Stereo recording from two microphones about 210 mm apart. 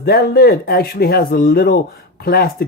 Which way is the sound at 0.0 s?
50° left (ahead or behind).